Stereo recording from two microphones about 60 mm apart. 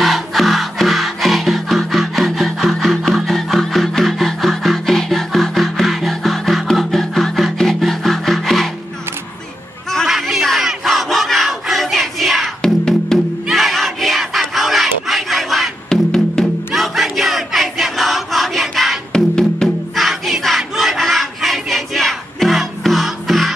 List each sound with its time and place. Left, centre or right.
0.0 s music: centre
10.0 s battle cry: centre
12.6 s music: centre
13.5 s battle cry: centre
16.4 s music: centre
16.7 s choir: centre
19.1 s music: centre
20.0 s battle cry: centre